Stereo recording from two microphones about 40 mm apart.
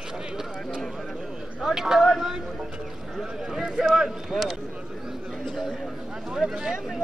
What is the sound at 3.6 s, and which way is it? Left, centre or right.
Speech, centre.